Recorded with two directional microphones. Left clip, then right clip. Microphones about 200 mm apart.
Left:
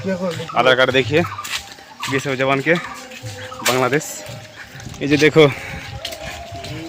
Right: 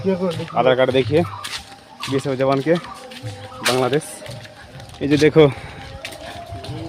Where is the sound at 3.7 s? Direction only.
5° left (ahead or behind).